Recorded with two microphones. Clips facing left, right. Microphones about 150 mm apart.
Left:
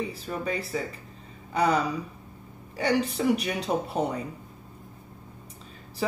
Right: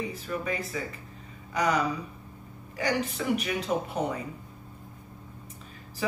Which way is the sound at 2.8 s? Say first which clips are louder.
Left 4 dB; 35° left (ahead or behind).